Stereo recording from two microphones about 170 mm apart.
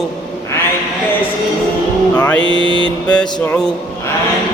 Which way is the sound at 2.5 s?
30° right (ahead or behind).